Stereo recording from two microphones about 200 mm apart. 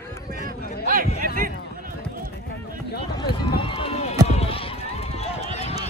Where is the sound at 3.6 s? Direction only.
25° left (ahead or behind).